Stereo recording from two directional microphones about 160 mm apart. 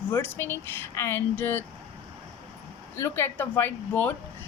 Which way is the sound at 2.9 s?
15° left (ahead or behind).